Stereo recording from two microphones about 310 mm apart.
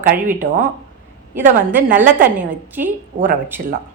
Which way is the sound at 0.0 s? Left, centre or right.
Right.